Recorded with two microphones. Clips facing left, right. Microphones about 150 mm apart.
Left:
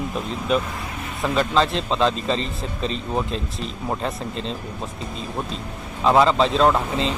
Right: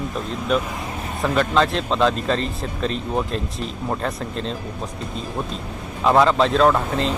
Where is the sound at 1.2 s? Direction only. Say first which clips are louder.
Right 1 dB; centre (ahead or behind).